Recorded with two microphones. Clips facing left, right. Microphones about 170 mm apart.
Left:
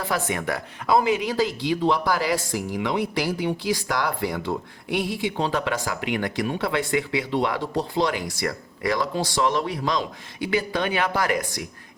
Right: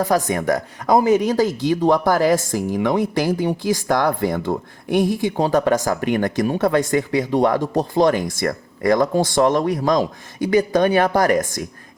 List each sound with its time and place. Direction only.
0.0 s speech: 40° right (ahead or behind)